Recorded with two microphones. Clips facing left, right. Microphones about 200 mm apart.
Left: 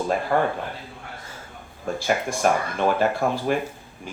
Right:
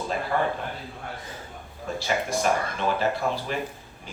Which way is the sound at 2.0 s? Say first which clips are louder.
Left 3 dB; 50° left (ahead or behind).